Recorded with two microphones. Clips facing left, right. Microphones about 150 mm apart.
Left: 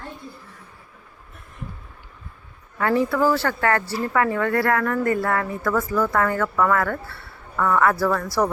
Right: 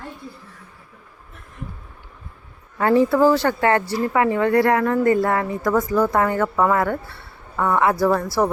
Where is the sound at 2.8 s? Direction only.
25° right (ahead or behind).